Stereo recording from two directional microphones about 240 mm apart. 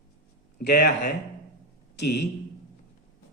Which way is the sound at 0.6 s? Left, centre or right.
Left.